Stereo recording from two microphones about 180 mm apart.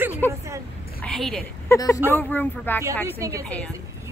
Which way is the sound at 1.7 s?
20° left (ahead or behind).